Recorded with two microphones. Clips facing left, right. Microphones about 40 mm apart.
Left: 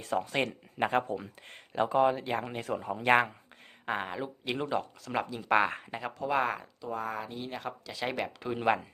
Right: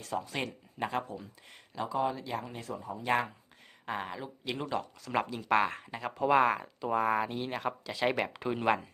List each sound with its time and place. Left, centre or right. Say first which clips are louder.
0.3 s speech: left 5 dB; left
3.8 s speech: left 3 dB; left
5.0 s speech: right 1 dB; centre
5.4 s speech: left 3 dB; centre
6.1 s speech: right 5 dB; centre
6.8 s speech: right 7 dB; right
7.6 s speech: right 6 dB; centre
8.5 s speech: left 1 dB; centre